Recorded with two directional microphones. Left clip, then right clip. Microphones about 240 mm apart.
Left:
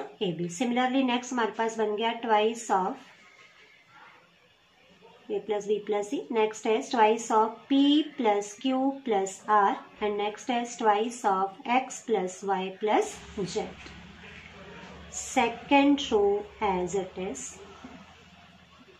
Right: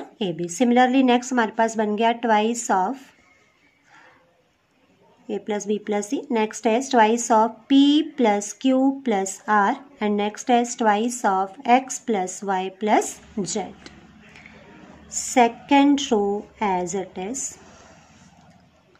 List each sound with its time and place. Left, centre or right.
0.2 s speech: right
5.5 s speech: right
15.3 s speech: right